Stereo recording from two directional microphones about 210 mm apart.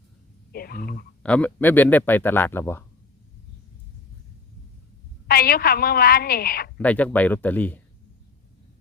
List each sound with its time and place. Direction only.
0.5 s a woman's voice: 45° left (ahead or behind)
1.2 s speech: 5° left (ahead or behind)
5.3 s a woman's voice: 45° left (ahead or behind)
6.7 s speech: 5° left (ahead or behind)